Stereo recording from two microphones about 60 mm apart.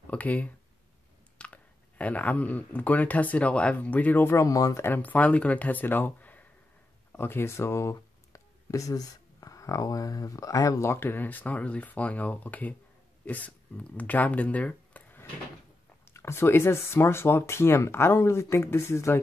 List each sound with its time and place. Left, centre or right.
0.1 s speech: left
4.3 s speech: left
4.7 s speech: left
10.8 s speech: left
16.1 s speech: left